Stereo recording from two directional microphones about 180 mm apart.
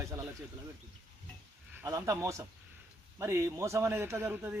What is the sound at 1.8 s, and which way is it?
A man's voice, 15° right (ahead or behind).